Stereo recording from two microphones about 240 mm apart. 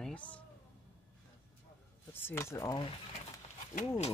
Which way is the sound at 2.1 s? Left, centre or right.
Centre.